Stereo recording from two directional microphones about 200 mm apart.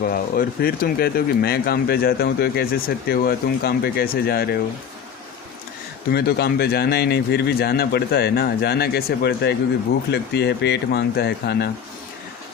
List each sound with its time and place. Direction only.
0.0 s speech: 45° left (ahead or behind)
6.1 s speech: 55° left (ahead or behind)